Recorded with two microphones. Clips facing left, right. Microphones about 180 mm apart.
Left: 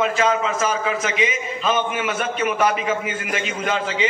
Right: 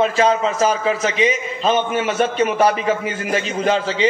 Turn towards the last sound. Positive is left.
turn(degrees=-35)  # may be behind; listen again after turning